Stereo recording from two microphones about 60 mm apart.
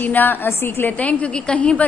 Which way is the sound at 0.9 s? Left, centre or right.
Left.